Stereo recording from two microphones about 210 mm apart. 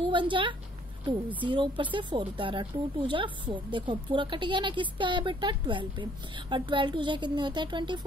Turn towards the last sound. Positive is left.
turn(degrees=-20)  # may be behind; listen again after turning